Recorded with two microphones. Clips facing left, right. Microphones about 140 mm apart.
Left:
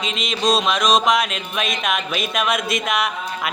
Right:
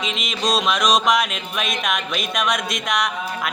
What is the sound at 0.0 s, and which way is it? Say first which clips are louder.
Music: left 3 dB; centre (ahead or behind).